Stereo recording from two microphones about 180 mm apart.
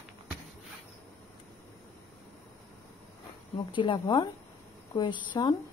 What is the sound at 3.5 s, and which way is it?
A woman's voice, 25° left (ahead or behind).